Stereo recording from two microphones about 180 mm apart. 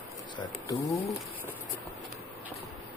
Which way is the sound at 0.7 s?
20° left (ahead or behind).